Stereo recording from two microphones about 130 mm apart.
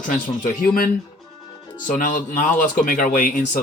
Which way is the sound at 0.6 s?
90° left.